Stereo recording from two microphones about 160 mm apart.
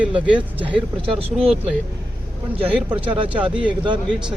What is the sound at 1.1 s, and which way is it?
Speech, 35° right (ahead or behind).